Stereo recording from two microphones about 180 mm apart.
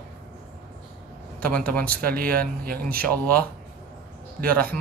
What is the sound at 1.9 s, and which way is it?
Speech, 55° right (ahead or behind).